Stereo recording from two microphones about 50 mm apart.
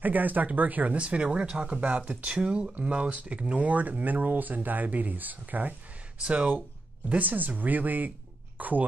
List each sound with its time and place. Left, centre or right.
0.0 s speech: right